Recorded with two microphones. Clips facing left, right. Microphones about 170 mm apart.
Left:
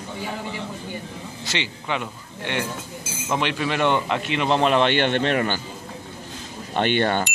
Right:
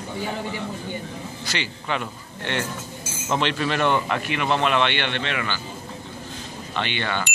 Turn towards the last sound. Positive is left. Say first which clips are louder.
# left 6 dB
turn(degrees=45)  # may be behind; listen again after turning